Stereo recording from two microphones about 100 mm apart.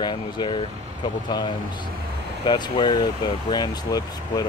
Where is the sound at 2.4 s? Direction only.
50° left (ahead or behind).